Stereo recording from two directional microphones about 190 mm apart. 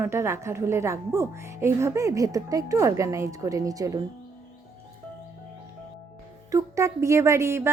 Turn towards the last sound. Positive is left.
turn(degrees=-15)  # may be behind; listen again after turning